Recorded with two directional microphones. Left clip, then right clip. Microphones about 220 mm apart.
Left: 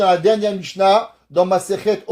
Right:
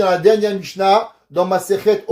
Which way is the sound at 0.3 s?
35° left (ahead or behind).